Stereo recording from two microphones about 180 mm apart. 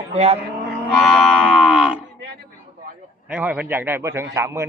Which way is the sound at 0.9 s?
Centre (ahead or behind).